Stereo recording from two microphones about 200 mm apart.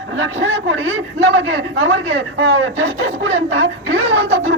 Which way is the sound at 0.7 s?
70° right (ahead or behind).